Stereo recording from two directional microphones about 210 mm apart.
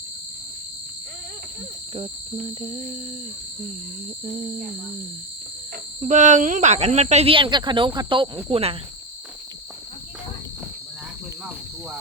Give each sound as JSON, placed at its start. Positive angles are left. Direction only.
{"t": 2.0, "sound": "cricket", "side_deg": -30}
{"t": 4.3, "sound": "cricket", "side_deg": -30}
{"t": 6.0, "sound": "speech", "side_deg": -35}
{"t": 8.4, "sound": "cricket", "side_deg": -30}